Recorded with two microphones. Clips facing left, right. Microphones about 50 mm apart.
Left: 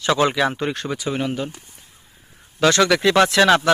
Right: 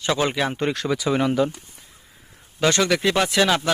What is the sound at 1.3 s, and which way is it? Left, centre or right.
Speech, centre.